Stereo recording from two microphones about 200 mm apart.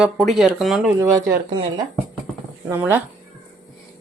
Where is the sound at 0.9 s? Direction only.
15° right (ahead or behind).